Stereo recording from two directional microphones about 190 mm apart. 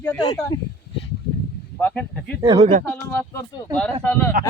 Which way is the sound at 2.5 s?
40° right (ahead or behind).